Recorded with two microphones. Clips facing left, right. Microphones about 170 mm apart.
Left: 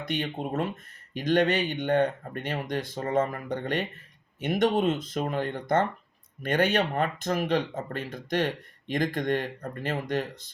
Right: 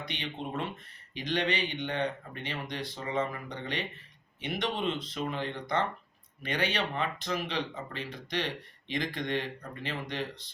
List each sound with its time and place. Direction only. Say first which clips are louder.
0.0 s speech: left 7 dB; 45° left (ahead or behind)